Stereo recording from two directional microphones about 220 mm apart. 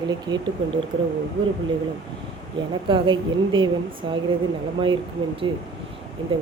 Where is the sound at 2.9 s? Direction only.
20° right (ahead or behind).